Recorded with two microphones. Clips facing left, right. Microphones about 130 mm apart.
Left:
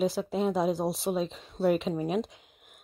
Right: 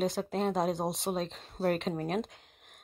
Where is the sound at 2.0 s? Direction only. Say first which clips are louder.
Left 3 dB; 5° left (ahead or behind).